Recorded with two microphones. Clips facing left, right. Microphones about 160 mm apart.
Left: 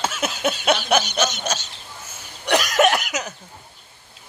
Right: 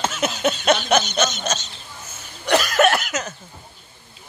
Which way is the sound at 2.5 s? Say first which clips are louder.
Right 1 dB; 15° left (ahead or behind).